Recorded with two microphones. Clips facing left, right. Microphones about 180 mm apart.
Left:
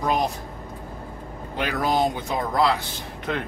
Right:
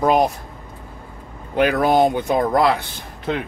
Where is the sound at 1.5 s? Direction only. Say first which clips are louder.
Right 8 dB; 55° right (ahead or behind).